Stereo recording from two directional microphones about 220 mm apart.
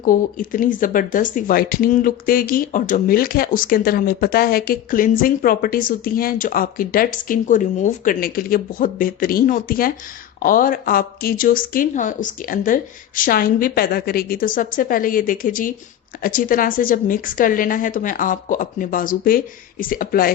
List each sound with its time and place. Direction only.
0.0 s speech: 40° left (ahead or behind)